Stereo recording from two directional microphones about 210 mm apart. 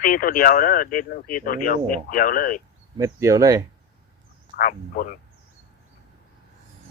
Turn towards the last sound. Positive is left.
turn(degrees=40)  # may be behind; listen again after turning